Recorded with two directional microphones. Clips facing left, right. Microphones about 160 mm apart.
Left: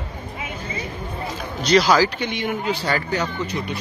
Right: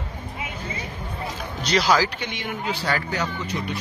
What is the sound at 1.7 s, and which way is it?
Speech, 40° left (ahead or behind).